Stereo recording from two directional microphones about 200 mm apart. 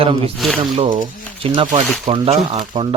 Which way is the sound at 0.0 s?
30° right (ahead or behind).